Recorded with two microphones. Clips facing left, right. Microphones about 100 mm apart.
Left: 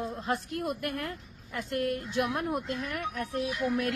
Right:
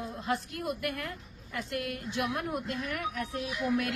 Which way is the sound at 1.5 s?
35° left (ahead or behind).